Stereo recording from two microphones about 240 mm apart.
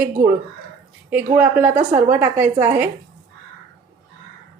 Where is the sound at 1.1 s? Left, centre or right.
Centre.